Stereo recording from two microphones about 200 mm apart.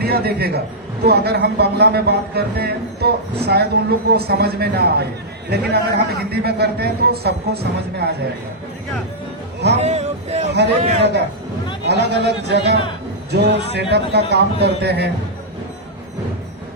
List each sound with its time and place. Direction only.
0.0 s speech: 50° right (ahead or behind)
9.7 s a sound: 35° right (ahead or behind)
10.5 s a man's voice: 60° right (ahead or behind)